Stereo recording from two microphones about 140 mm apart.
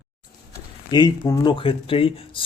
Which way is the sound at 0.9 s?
30° left (ahead or behind).